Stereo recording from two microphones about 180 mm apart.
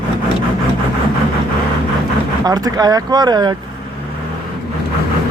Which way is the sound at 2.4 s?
20° right (ahead or behind).